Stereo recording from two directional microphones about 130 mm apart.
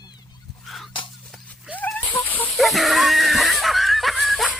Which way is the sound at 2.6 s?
Centre (ahead or behind).